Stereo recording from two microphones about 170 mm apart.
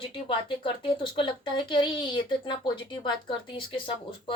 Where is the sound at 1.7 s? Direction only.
30° left (ahead or behind).